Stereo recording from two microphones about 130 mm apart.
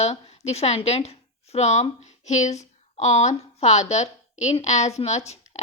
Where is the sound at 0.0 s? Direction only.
55° left (ahead or behind).